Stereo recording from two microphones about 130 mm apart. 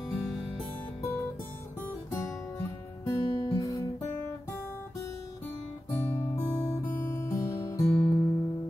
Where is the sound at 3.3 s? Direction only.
30° left (ahead or behind).